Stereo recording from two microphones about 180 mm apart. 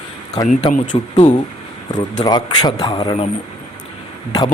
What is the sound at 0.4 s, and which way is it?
Speech, 45° left (ahead or behind).